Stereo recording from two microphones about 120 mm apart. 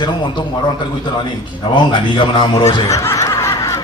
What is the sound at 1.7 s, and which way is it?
Speech, 40° left (ahead or behind).